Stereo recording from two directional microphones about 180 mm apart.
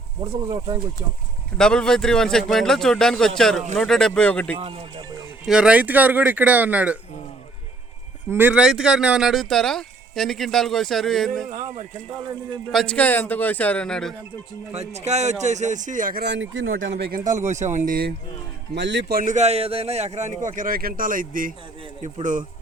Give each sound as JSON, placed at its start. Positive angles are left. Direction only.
{"t": 1.5, "sound": "speech", "side_deg": 5}
{"t": 4.6, "sound": "speech", "side_deg": -30}
{"t": 5.5, "sound": "speech", "side_deg": -5}
{"t": 8.3, "sound": "speech", "side_deg": -10}
{"t": 12.7, "sound": "speech", "side_deg": 5}
{"t": 14.7, "sound": "speech", "side_deg": -35}
{"t": 16.2, "sound": "speech", "side_deg": -85}
{"t": 17.0, "sound": "a man's voice", "side_deg": -50}
{"t": 18.7, "sound": "a man's voice", "side_deg": -75}